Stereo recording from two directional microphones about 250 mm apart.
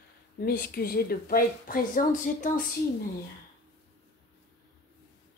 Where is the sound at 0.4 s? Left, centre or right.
Left.